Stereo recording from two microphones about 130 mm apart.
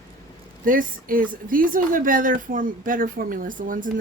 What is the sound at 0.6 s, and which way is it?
A woman's voice, 90° right.